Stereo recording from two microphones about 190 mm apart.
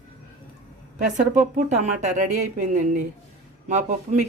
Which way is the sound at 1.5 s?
40° right (ahead or behind).